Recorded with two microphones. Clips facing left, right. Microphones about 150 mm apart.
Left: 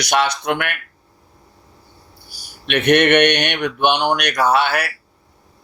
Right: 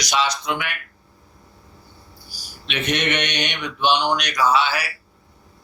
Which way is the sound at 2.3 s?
60° left (ahead or behind).